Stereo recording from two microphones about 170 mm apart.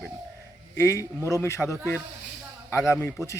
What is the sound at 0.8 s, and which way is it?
A man's voice, 15° left (ahead or behind).